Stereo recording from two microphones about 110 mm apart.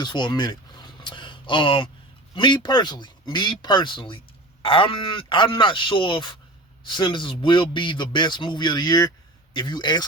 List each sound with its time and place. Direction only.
0.0 s speech: 40° left (ahead or behind)
1.0 s a sound: 45° left (ahead or behind)
2.3 s speech: 45° left (ahead or behind)